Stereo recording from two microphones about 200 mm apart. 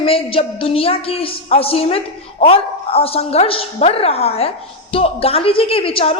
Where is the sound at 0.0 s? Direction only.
25° left (ahead or behind).